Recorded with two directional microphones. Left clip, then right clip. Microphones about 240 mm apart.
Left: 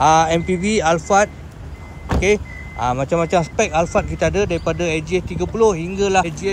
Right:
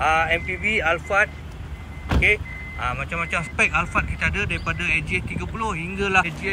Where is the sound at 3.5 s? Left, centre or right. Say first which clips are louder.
Left 3 dB; centre.